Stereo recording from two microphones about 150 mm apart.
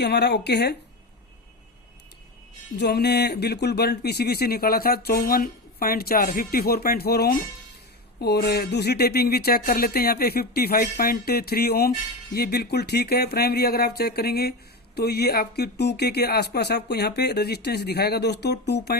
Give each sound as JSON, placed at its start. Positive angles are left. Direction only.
{"t": 0.0, "sound": "speech", "side_deg": 90}
{"t": 2.8, "sound": "speech", "side_deg": 90}